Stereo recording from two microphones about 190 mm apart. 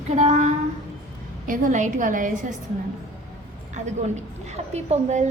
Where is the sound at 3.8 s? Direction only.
35° right (ahead or behind).